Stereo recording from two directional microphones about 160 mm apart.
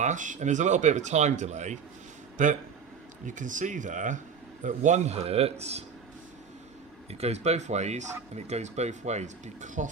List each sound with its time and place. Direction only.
0.0 s a man's voice: 50° right (ahead or behind)
7.1 s speech: 40° right (ahead or behind)